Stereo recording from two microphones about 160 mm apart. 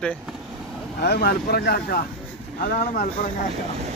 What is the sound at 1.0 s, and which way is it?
Speech, 90° left.